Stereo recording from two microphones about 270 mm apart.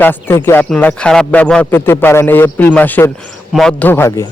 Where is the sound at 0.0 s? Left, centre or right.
Centre.